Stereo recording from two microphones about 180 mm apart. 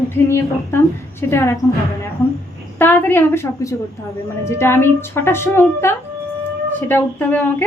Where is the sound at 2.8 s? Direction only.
10° left (ahead or behind).